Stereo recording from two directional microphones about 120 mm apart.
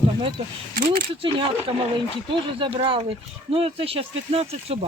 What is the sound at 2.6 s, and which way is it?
Speech, 50° right (ahead or behind).